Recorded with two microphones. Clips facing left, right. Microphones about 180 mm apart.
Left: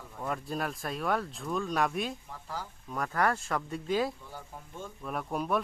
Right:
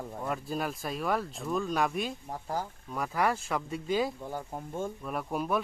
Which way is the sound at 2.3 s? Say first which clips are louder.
Right 6 dB; 45° right (ahead or behind).